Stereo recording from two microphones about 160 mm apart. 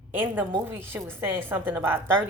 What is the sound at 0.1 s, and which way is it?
A woman's voice, 15° right (ahead or behind).